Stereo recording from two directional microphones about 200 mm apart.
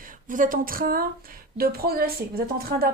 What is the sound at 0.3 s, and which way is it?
Speech, 40° right (ahead or behind).